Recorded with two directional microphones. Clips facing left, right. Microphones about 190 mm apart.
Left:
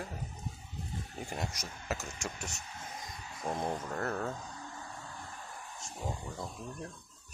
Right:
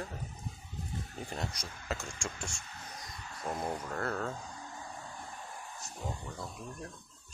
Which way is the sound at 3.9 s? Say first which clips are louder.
Even; 15° left (ahead or behind).